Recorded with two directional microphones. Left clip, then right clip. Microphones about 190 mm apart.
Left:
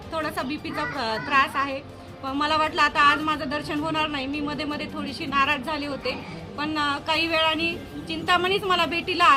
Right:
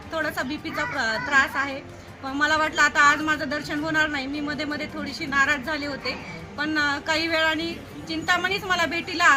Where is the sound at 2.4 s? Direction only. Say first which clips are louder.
Right 1 dB; 25° left (ahead or behind).